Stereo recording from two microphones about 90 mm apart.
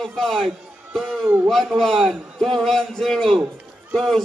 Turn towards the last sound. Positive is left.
turn(degrees=5)  # may be behind; listen again after turning